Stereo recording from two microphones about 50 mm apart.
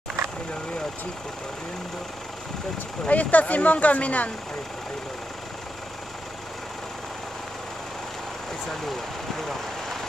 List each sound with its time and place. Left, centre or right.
3.1 s speech: left